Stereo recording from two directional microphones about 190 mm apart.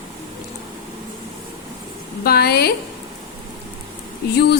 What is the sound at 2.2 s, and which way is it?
Speech, 55° left (ahead or behind).